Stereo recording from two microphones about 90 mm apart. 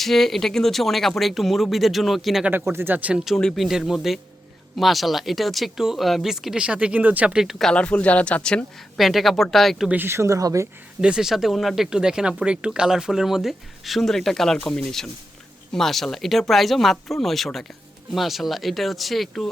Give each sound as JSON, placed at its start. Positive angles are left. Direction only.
{"t": 0.0, "sound": "speech", "side_deg": 5}
{"t": 2.5, "sound": "speech", "side_deg": -25}
{"t": 3.2, "sound": "speech", "side_deg": 0}
{"t": 7.4, "sound": "speech", "side_deg": 5}
{"t": 9.0, "sound": "speech", "side_deg": 0}
{"t": 9.9, "sound": "speech", "side_deg": -25}
{"t": 11.0, "sound": "speech", "side_deg": -10}